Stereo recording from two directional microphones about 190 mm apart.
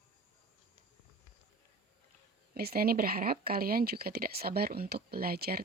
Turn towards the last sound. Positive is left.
turn(degrees=-55)  # may be behind; listen again after turning